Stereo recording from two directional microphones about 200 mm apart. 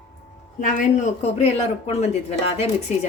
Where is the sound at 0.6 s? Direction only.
40° left (ahead or behind).